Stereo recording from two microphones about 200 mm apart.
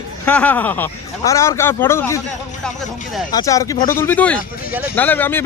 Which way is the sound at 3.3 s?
15° left (ahead or behind).